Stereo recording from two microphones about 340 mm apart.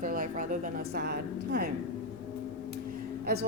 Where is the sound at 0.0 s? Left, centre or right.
Right.